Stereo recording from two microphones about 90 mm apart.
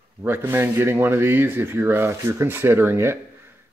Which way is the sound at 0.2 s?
25° right (ahead or behind).